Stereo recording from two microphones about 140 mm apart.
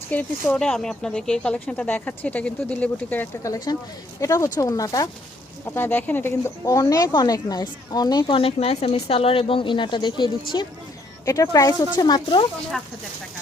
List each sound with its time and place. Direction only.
0.1 s speech: 10° left (ahead or behind)
3.4 s speech: 25° left (ahead or behind)